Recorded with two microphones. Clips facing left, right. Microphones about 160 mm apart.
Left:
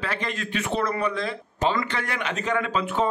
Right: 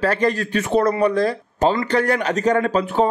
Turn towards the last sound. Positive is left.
turn(degrees=-35)  # may be behind; listen again after turning